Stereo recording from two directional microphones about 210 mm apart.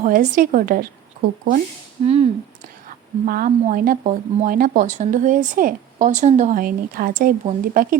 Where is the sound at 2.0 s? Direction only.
30° right (ahead or behind).